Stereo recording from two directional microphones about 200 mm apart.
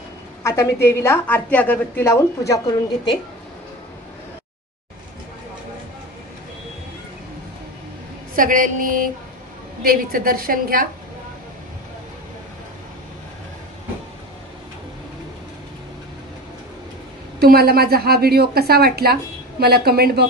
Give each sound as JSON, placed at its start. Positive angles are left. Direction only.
{"t": 0.4, "sound": "a woman's voice", "side_deg": 15}
{"t": 8.4, "sound": "a woman's voice", "side_deg": -40}
{"t": 17.4, "sound": "a woman's voice", "side_deg": -50}